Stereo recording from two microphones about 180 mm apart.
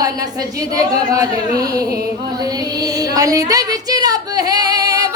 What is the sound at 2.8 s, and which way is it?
Female singing, 20° right (ahead or behind).